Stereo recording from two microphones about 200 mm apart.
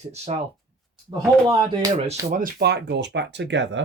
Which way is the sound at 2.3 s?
45° right (ahead or behind).